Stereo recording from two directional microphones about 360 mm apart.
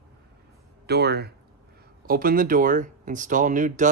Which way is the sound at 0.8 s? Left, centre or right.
Right.